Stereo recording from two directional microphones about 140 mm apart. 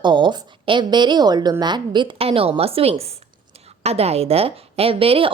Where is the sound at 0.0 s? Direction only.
35° right (ahead or behind).